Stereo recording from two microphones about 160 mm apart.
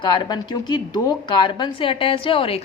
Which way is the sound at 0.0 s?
30° left (ahead or behind).